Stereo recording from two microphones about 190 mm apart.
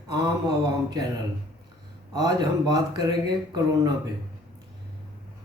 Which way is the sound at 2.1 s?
20° right (ahead or behind).